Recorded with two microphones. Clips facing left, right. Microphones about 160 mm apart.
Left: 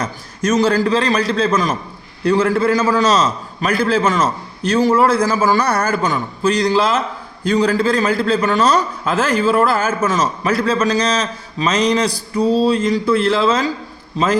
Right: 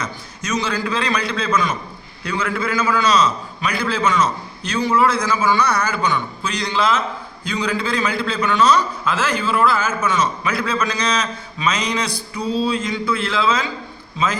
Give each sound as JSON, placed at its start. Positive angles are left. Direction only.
{"t": 0.0, "sound": "a man's voice", "side_deg": 50}